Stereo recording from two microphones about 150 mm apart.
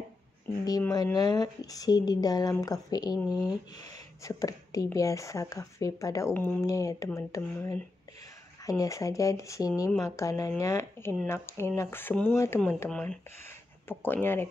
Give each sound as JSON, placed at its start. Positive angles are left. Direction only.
{"t": 0.7, "sound": "speech", "side_deg": 25}
{"t": 3.3, "sound": "speech", "side_deg": -5}
{"t": 4.2, "sound": "speech", "side_deg": 20}